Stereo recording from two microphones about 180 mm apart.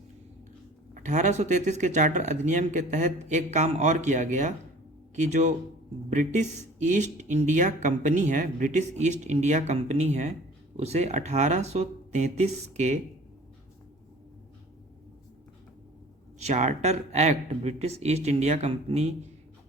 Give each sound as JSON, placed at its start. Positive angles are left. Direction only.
{"t": 0.9, "sound": "speech", "side_deg": -45}
{"t": 16.4, "sound": "speech", "side_deg": -40}